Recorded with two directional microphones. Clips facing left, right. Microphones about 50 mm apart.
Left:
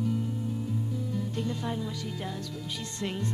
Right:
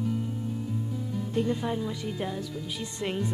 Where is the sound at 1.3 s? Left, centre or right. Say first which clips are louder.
Right 5 dB; centre.